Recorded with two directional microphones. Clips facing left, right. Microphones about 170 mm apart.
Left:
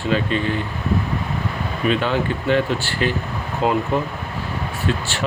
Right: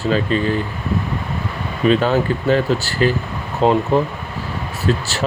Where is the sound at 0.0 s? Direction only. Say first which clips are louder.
Right 3 dB; 35° right (ahead or behind).